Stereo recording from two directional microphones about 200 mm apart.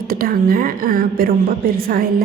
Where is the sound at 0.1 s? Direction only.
45° right (ahead or behind).